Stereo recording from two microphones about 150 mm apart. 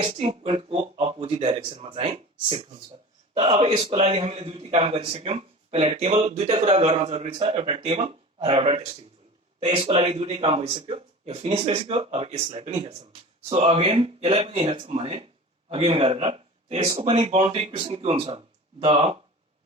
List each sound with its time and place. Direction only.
0.0 s a man's voice: 40° right (ahead or behind)